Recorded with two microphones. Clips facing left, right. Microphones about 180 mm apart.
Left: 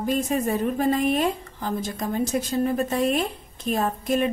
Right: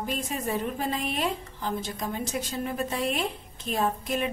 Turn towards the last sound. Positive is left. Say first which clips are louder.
# left 4 dB
turn(degrees=45)  # may be behind; listen again after turning